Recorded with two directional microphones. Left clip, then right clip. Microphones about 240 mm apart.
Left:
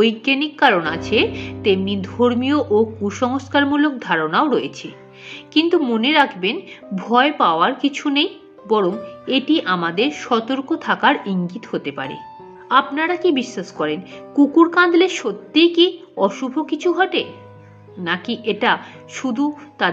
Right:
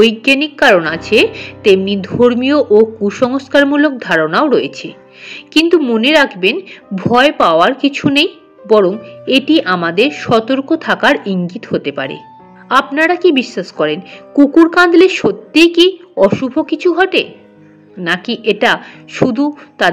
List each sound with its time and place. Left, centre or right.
0.0 s a woman's voice: centre